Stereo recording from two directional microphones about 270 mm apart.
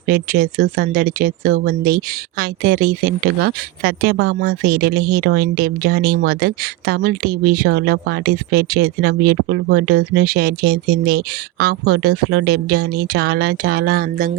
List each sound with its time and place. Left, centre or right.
0.1 s speech: right